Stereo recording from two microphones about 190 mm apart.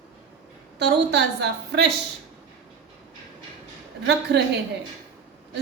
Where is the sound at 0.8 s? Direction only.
60° right (ahead or behind).